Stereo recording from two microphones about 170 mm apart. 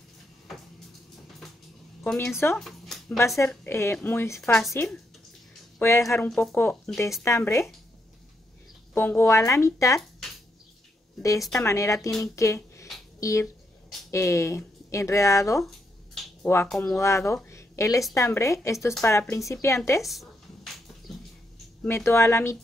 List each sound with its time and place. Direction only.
0.5 s a sound: centre (ahead or behind)
2.0 s speech: 5° left (ahead or behind)
3.4 s speech: 15° left (ahead or behind)
4.4 s a woman's voice: centre (ahead or behind)
5.8 s speech: 15° left (ahead or behind)
8.9 s speech: 10° left (ahead or behind)
11.6 s a woman's voice: 15° left (ahead or behind)
17.0 s speech: 15° left (ahead or behind)
20.0 s a sound: centre (ahead or behind)
21.8 s speech: 15° left (ahead or behind)